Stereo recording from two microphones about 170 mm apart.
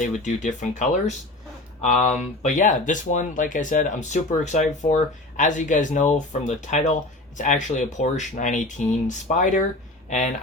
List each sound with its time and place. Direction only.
0.0 s speech: 45° left (ahead or behind)
2.4 s speech: 45° left (ahead or behind)